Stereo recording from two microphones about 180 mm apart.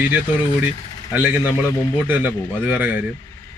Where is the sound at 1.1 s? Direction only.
10° right (ahead or behind).